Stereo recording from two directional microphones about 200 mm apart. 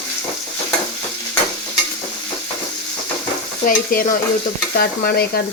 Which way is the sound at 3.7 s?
45° left (ahead or behind).